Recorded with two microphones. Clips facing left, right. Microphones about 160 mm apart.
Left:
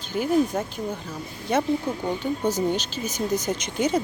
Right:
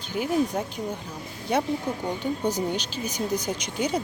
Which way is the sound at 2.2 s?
15° right (ahead or behind).